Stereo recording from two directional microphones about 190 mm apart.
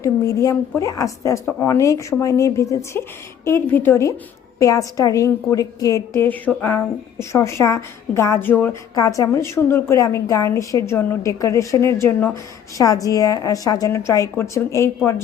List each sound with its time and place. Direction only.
0.0 s a woman's voice: 15° left (ahead or behind)